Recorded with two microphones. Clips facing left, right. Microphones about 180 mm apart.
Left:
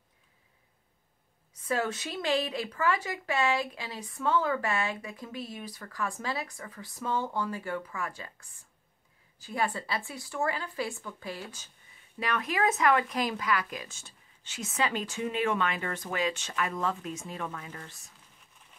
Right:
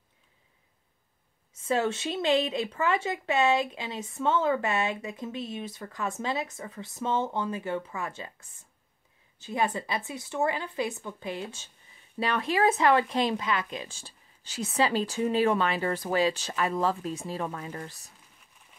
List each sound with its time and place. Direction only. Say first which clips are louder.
1.5 s speech: right 4 dB; 25° right (ahead or behind)